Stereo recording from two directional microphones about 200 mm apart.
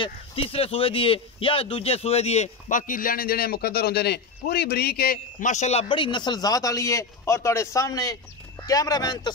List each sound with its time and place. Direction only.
0.0 s speech: 30° left (ahead or behind)